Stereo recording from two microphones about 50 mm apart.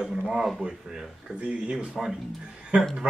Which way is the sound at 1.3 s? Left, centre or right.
Right.